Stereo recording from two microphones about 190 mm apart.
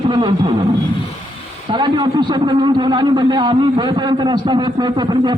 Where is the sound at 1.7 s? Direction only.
25° right (ahead or behind).